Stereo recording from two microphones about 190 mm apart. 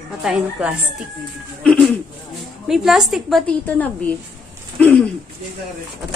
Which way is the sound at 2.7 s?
Centre (ahead or behind).